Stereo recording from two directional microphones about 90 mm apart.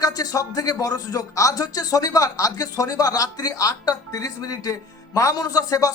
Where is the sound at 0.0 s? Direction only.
40° left (ahead or behind).